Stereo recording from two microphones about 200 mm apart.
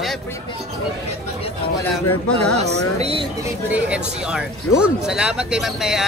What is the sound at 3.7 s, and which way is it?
Speech, 5° right (ahead or behind).